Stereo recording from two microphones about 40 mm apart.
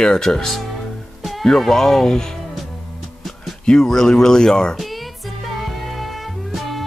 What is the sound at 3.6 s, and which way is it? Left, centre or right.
Speech, centre.